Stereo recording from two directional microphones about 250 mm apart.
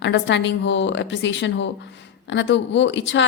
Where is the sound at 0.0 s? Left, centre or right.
Left.